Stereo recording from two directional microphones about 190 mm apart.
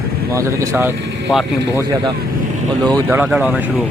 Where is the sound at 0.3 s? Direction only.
15° right (ahead or behind).